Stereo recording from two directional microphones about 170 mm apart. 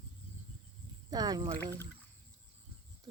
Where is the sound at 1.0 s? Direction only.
25° right (ahead or behind).